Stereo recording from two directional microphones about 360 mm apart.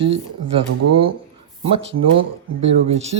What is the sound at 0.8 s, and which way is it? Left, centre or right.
Speech, right.